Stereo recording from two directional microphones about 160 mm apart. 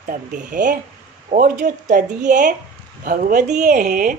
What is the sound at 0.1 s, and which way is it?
A woman's voice, 55° right (ahead or behind).